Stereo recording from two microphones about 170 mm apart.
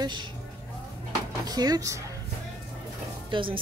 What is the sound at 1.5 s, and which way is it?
Speech, 20° right (ahead or behind).